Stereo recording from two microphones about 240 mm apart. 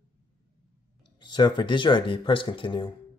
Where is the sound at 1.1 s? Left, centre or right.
Centre.